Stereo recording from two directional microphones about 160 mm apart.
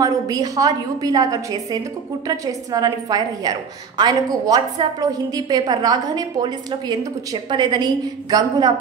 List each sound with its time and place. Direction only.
0.0 s a woman's voice: 25° right (ahead or behind)